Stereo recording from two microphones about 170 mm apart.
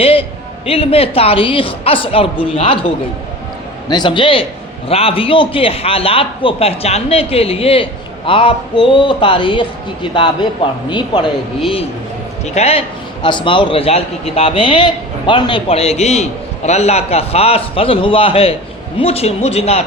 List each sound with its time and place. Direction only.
0.0 s a man's voice: 35° left (ahead or behind)
3.8 s a man's voice: 25° left (ahead or behind)
12.5 s a man's voice: 35° left (ahead or behind)